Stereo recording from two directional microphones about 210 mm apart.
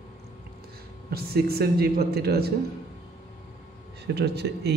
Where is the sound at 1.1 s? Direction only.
45° right (ahead or behind).